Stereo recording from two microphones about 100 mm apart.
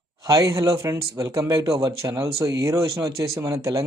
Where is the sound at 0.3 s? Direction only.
35° right (ahead or behind).